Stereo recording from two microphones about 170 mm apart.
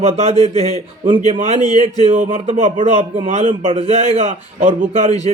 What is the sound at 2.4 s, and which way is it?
A man's voice, 35° right (ahead or behind).